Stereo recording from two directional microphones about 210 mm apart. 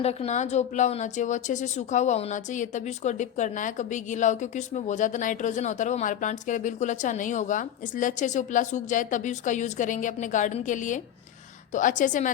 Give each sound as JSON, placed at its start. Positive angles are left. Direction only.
{"t": 0.0, "sound": "a woman's voice", "side_deg": 30}